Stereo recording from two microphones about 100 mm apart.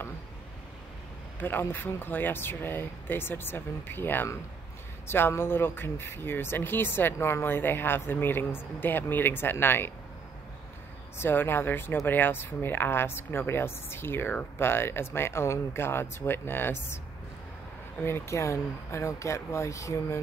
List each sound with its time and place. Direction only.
1.4 s speech: 20° left (ahead or behind)
11.1 s speech: 20° left (ahead or behind)
18.0 s speech: 25° left (ahead or behind)